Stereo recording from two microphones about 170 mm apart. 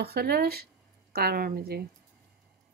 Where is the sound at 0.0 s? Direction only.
65° right (ahead or behind).